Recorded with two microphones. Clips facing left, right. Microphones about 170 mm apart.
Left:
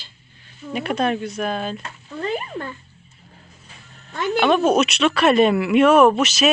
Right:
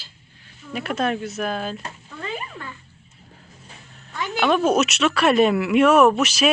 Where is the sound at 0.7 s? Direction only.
Centre (ahead or behind).